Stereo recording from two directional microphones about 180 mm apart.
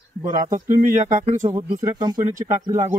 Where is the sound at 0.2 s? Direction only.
45° right (ahead or behind).